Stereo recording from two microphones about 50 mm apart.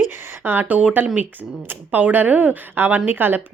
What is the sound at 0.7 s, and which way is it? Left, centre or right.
Speech, right.